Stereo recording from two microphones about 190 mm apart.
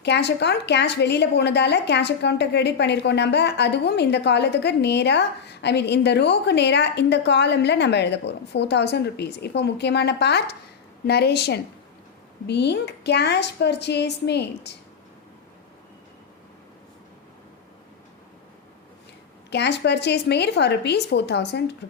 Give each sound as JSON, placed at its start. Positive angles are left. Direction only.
{"t": 0.0, "sound": "a woman's voice", "side_deg": 60}
{"t": 19.5, "sound": "a woman's voice", "side_deg": 65}